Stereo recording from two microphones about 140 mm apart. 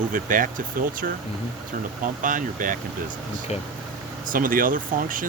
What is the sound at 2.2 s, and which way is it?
Speech, 70° right (ahead or behind).